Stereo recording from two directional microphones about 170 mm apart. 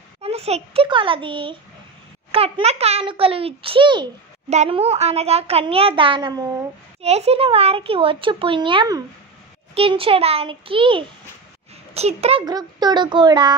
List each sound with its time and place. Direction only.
0.2 s a child's voice: 40° right (ahead or behind)
4.5 s a child's voice: 40° right (ahead or behind)
7.0 s a child's voice: 40° right (ahead or behind)
12.4 s a child's voice: 25° right (ahead or behind)